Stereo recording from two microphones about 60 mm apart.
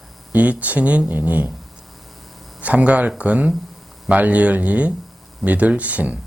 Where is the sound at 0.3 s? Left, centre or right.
Right.